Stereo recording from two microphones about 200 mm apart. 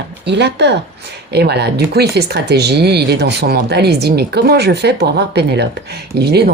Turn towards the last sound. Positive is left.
turn(degrees=-55)  # may be behind; listen again after turning